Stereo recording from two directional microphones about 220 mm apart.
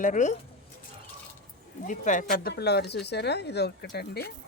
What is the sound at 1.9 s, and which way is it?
Speech, 35° left (ahead or behind).